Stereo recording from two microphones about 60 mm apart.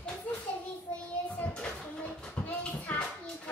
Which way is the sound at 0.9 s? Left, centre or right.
Left.